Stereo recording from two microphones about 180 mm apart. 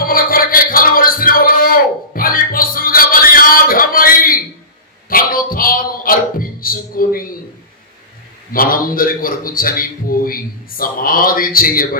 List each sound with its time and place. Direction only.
0.0 s music: 55° left (ahead or behind)
5.0 s a sound: 50° left (ahead or behind)
8.5 s a man's voice: 55° left (ahead or behind)